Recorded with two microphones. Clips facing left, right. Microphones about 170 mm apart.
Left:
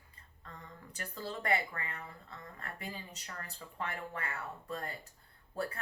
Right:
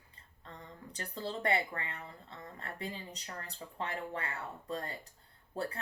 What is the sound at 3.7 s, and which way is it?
Speech, 30° right (ahead or behind).